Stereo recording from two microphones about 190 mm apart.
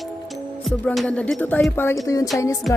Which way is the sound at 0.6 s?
5° left (ahead or behind).